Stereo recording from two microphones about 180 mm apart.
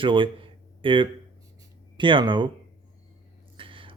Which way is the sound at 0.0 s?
30° right (ahead or behind).